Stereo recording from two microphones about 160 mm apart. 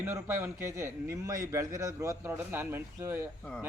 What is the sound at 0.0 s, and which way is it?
A man's voice, 15° right (ahead or behind).